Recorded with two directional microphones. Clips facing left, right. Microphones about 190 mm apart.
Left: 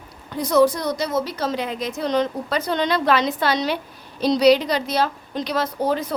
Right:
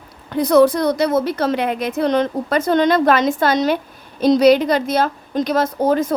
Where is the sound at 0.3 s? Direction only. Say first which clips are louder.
Right 5 dB; 60° right (ahead or behind).